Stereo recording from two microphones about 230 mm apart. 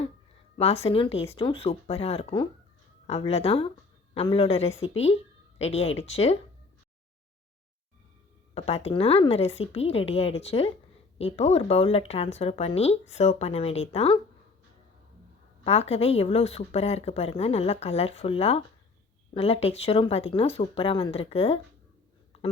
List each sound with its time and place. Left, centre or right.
0.5 s a woman's voice: left
8.5 s speech: left
15.6 s speech: left